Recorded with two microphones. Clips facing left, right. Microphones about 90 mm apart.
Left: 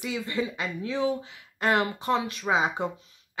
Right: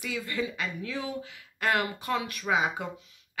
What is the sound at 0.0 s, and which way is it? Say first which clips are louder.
Speech: left 3 dB; 20° left (ahead or behind).